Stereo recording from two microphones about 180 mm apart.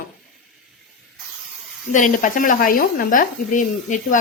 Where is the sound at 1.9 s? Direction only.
45° left (ahead or behind).